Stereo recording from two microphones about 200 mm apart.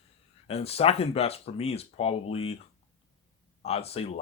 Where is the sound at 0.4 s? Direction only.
30° left (ahead or behind).